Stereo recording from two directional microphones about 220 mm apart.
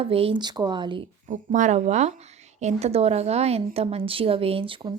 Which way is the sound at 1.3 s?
35° right (ahead or behind).